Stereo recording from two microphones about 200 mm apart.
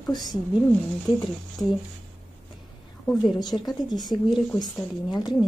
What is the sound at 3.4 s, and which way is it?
Speech, 20° left (ahead or behind).